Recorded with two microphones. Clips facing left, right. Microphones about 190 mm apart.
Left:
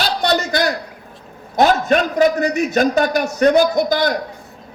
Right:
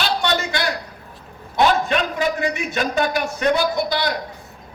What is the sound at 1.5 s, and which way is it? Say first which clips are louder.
A man's voice: left 4 dB; 45° left (ahead or behind).